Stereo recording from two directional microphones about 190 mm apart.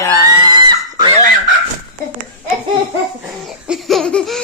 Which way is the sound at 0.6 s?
25° right (ahead or behind).